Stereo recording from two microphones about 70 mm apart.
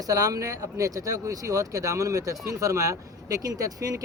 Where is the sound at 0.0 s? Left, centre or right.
Right.